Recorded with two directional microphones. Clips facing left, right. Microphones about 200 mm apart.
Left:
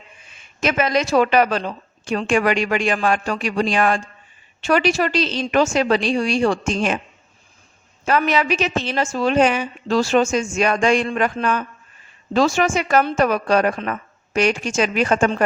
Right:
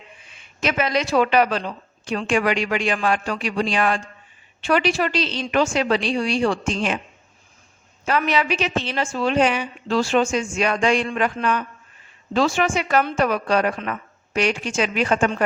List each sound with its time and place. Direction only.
0.6 s a woman's voice: 45° left (ahead or behind)
8.0 s a woman's voice: 45° left (ahead or behind)